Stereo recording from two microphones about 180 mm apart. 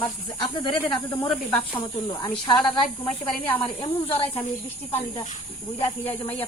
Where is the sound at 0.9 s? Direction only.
Centre (ahead or behind).